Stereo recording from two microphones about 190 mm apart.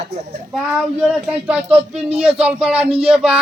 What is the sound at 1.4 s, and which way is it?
A man's voice, 5° right (ahead or behind).